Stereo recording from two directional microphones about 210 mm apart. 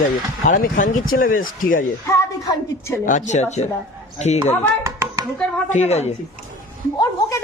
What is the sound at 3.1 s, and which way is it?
Speech, 35° left (ahead or behind).